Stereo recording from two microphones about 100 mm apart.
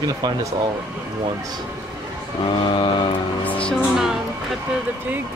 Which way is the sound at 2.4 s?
60° left (ahead or behind).